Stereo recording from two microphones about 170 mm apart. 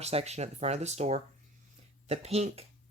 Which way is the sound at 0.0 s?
40° right (ahead or behind).